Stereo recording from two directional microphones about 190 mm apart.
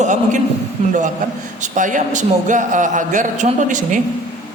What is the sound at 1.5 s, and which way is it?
A woman's voice, 40° right (ahead or behind).